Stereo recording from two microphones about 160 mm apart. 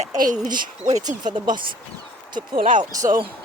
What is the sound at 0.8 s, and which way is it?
Speech, 25° right (ahead or behind).